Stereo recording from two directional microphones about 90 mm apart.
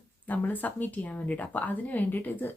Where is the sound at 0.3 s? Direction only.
20° left (ahead or behind).